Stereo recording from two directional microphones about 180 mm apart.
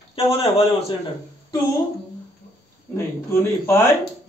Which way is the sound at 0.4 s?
35° left (ahead or behind).